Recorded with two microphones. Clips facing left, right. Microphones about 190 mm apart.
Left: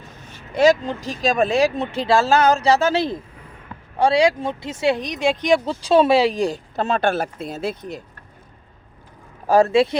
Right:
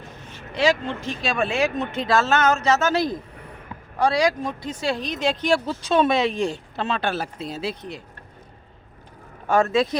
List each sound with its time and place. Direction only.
0.3 s speech: 45° left (ahead or behind); by 5.5 s 10° left (ahead or behind)
5.5 s speech: 30° left (ahead or behind); by 8.0 s 45° left (ahead or behind)
9.5 s speech: 35° left (ahead or behind)